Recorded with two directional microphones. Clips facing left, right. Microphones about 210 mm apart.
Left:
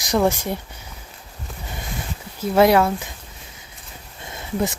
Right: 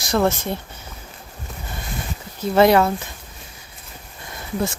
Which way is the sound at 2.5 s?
5° left (ahead or behind).